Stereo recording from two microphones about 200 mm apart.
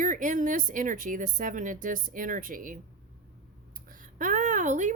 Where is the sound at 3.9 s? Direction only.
40° right (ahead or behind).